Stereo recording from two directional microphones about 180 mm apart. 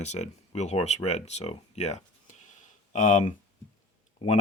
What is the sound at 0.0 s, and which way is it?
Speech, 40° left (ahead or behind).